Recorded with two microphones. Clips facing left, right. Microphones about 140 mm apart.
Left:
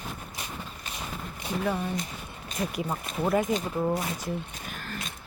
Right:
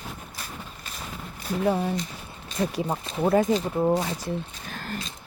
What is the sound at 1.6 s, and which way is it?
Speech, 30° right (ahead or behind).